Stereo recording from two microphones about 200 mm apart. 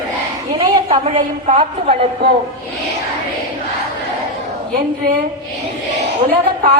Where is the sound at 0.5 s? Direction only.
30° right (ahead or behind).